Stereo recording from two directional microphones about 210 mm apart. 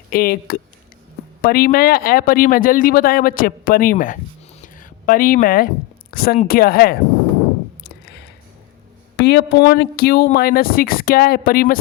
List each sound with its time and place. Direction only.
0.1 s speech: 45° left (ahead or behind)
9.1 s speech: 55° left (ahead or behind)